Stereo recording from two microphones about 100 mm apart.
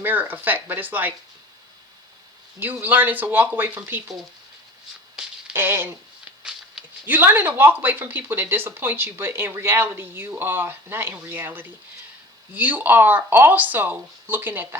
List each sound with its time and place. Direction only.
0.0 s speech: 20° right (ahead or behind)
2.8 s speech: 20° right (ahead or behind)
5.2 s a sound: 5° right (ahead or behind)
5.5 s speech: 25° right (ahead or behind)
7.0 s speech: 20° right (ahead or behind)